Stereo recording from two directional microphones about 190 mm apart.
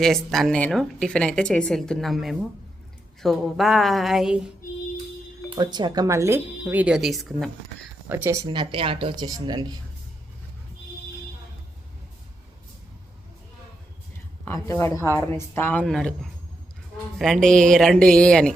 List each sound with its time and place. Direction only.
0.0 s a woman's voice: centre (ahead or behind)
5.5 s speech: 25° right (ahead or behind); by 7.5 s centre (ahead or behind)
8.1 s speech: 15° right (ahead or behind)
14.4 s a woman's voice: 15° left (ahead or behind)